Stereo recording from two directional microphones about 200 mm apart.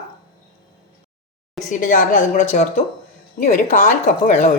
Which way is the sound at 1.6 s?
40° left (ahead or behind).